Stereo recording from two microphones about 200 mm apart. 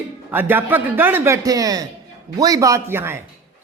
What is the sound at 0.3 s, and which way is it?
Speech, 10° right (ahead or behind).